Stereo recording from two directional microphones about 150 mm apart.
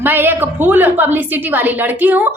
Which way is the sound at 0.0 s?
15° right (ahead or behind).